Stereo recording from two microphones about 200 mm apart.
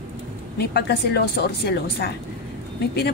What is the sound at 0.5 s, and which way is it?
A woman's voice, 55° left (ahead or behind).